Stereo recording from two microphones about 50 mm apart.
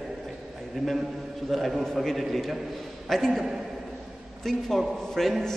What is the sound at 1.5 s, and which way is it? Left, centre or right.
A man's voice, centre.